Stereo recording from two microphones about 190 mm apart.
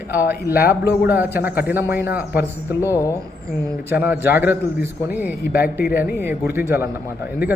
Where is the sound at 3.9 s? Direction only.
10° right (ahead or behind).